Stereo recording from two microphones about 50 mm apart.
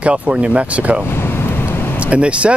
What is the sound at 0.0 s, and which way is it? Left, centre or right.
Speech, right.